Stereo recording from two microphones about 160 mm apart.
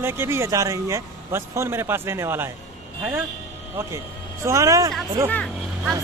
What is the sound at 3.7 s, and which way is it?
Speech, 15° right (ahead or behind).